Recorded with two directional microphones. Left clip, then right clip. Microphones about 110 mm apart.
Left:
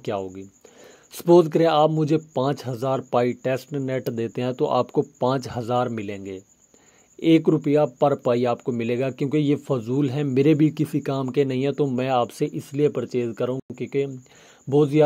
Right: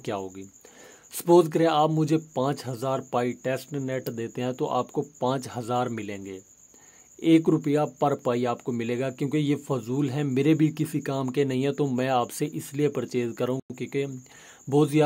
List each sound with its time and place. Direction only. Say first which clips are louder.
0.0 s speech: left 4 dB; 20° left (ahead or behind)
1.6 s speech: left 4 dB; 30° left (ahead or behind)
2.0 s speech: left 3 dB; 20° left (ahead or behind)
7.4 s speech: left 4 dB; 20° left (ahead or behind)